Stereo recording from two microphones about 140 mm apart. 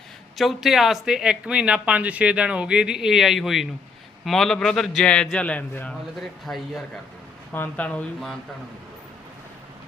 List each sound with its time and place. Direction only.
0.3 s speech: centre (ahead or behind)
7.5 s speech: 10° left (ahead or behind)